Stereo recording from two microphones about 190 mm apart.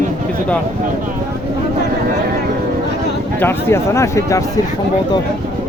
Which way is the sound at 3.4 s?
15° left (ahead or behind).